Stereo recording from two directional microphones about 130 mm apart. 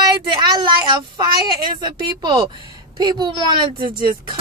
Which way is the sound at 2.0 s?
35° right (ahead or behind).